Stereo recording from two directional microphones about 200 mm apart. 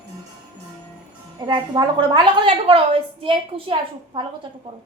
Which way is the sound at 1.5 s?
25° right (ahead or behind).